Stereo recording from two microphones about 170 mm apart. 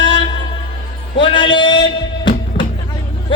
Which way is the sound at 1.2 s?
30° left (ahead or behind).